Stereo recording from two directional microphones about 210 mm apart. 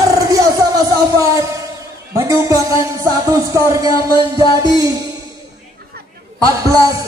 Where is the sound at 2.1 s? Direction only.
15° right (ahead or behind).